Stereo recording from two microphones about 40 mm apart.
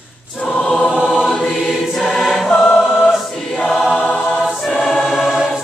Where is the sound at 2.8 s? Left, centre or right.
Centre.